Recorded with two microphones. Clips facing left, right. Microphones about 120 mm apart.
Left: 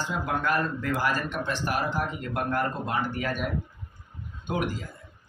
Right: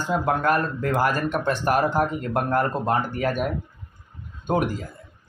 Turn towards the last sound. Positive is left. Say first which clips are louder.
# right 6 dB
turn(degrees=-45)  # may be behind; listen again after turning